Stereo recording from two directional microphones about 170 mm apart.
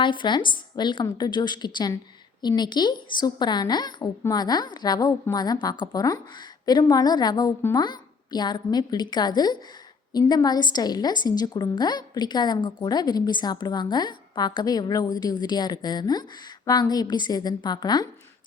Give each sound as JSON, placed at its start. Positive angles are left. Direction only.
{"t": 0.0, "sound": "a woman's voice", "side_deg": 30}